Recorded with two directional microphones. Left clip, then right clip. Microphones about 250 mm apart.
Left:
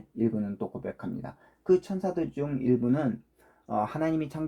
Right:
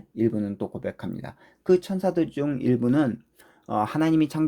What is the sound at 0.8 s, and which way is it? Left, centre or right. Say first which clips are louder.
Speech: right 4 dB; right.